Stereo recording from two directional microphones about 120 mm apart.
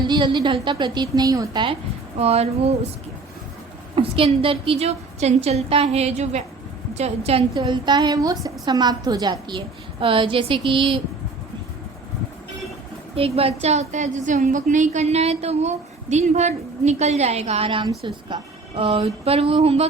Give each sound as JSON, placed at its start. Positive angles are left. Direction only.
{"t": 0.0, "sound": "a woman's voice", "side_deg": -40}
{"t": 2.1, "sound": "a woman's voice", "side_deg": -60}
{"t": 3.9, "sound": "a woman's voice", "side_deg": -50}
{"t": 7.5, "sound": "a woman's voice", "side_deg": -40}
{"t": 13.1, "sound": "a woman's voice", "side_deg": -55}
{"t": 18.8, "sound": "a sound", "side_deg": -50}